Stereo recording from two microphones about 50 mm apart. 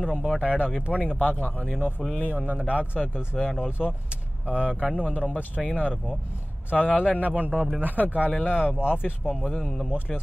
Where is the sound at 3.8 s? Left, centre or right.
Right.